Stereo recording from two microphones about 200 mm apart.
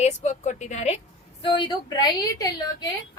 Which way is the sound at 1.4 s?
20° left (ahead or behind).